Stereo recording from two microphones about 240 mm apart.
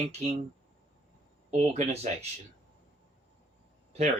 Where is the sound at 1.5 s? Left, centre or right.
Right.